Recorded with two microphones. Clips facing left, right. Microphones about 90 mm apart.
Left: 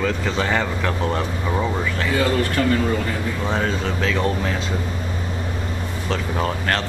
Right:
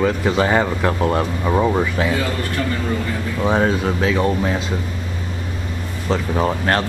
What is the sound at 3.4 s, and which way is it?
Speech, 15° right (ahead or behind).